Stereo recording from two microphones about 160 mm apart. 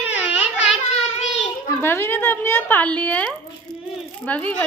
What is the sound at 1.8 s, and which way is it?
A woman's voice, 15° left (ahead or behind).